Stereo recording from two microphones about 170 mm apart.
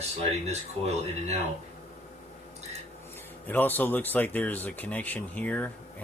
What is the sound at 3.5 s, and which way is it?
Speech, 10° left (ahead or behind).